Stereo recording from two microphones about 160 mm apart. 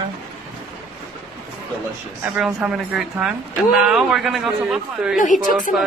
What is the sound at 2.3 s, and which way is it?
Speech, 5° right (ahead or behind).